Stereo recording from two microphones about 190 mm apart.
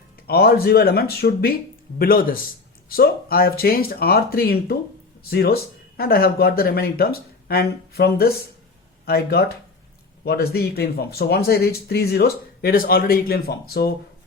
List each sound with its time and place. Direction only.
0.3 s speech: 55° left (ahead or behind)